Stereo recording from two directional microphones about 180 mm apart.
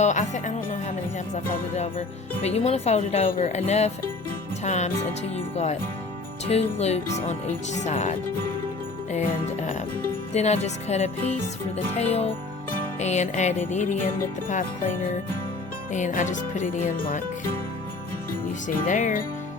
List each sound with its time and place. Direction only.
0.0 s speech: 40° left (ahead or behind)
6.4 s speech: 35° left (ahead or behind)
9.1 s music: 45° left (ahead or behind)
10.3 s speech: 35° left (ahead or behind)
13.7 s music: 45° left (ahead or behind)
15.9 s music: 45° left (ahead or behind)
18.9 s music: 45° left (ahead or behind)